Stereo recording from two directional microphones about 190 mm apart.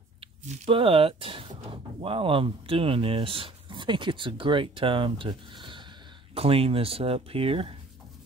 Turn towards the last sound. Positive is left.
turn(degrees=-30)  # may be behind; listen again after turning